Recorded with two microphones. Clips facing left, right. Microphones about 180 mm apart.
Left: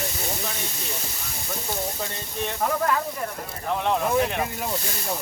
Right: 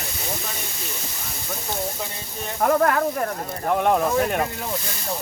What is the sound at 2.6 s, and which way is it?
Speech, 60° right (ahead or behind).